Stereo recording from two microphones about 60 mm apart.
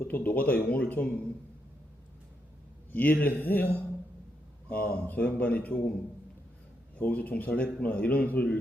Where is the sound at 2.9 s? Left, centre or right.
Left.